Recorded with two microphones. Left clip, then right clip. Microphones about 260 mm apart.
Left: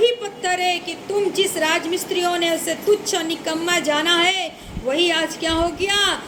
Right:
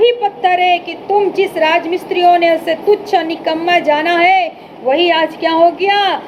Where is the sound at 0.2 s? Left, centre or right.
Left.